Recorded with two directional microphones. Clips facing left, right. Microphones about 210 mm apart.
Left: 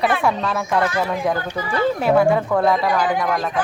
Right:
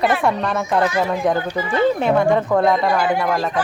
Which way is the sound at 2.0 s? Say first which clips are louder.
Even; 5° left (ahead or behind).